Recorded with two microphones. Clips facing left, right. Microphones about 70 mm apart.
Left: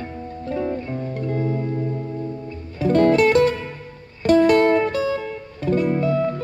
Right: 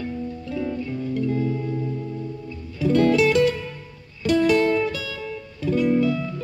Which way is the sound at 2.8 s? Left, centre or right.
Left.